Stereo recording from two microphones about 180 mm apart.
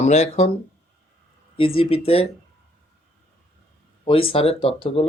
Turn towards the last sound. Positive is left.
turn(degrees=30)  # may be behind; listen again after turning